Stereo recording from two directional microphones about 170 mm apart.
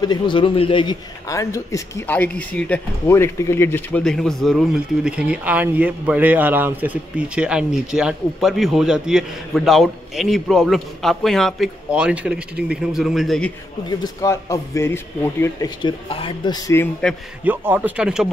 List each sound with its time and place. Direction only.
0.0 s speech: 25° left (ahead or behind)
1.3 s speech: 20° left (ahead or behind); by 13.5 s centre (ahead or behind)
13.8 s speech: 20° left (ahead or behind)
17.5 s speech: 10° right (ahead or behind)